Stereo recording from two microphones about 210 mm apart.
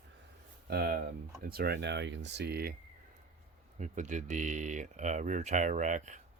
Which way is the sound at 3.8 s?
35° right (ahead or behind).